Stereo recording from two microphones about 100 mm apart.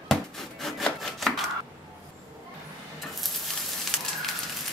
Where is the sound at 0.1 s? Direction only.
5° left (ahead or behind).